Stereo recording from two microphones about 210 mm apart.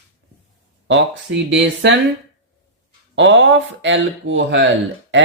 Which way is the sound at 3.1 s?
60° right (ahead or behind).